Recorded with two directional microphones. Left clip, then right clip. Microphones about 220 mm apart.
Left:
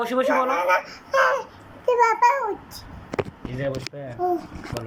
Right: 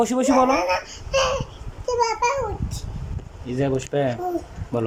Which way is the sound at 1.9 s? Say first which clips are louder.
Left 3 dB; 10° left (ahead or behind).